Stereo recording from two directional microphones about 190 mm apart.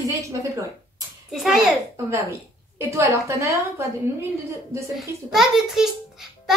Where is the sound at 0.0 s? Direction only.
15° right (ahead or behind).